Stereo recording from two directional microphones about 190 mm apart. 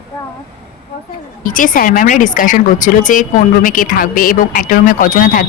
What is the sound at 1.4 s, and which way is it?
Speech, 45° left (ahead or behind).